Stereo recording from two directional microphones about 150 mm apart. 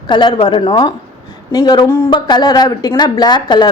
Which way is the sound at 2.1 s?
30° left (ahead or behind).